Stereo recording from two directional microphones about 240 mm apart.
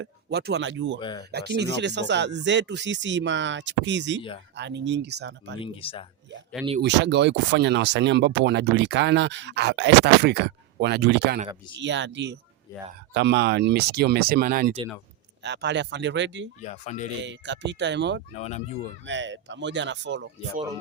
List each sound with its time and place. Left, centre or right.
0.0 s speech: right
0.9 s speech: centre
1.3 s speech: right
5.5 s speech: left
6.8 s speech: right
16.6 s speech: left
17.2 s speech: right
18.3 s speech: left
19.0 s speech: right